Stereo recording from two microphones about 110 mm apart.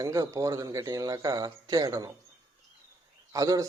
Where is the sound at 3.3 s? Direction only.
30° right (ahead or behind).